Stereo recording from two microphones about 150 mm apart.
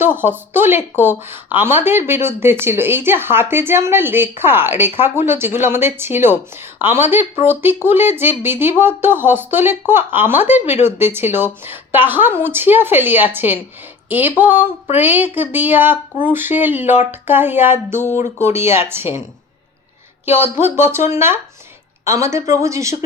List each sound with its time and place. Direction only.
0.0 s a woman's voice: 15° right (ahead or behind)
20.2 s a woman's voice: 15° right (ahead or behind)